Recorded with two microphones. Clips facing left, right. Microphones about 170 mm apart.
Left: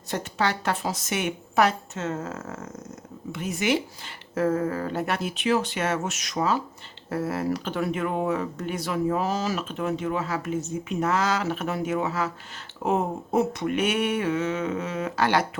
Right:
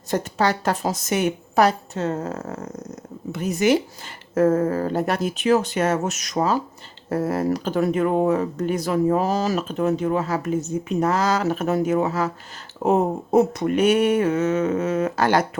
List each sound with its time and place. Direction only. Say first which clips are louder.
0.1 s a woman's voice: right 5 dB; 40° right (ahead or behind)